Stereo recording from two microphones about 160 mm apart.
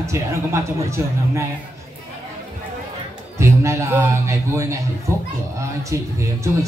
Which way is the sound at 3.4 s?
15° right (ahead or behind).